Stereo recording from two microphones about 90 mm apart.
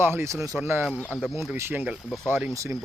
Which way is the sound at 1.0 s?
15° left (ahead or behind).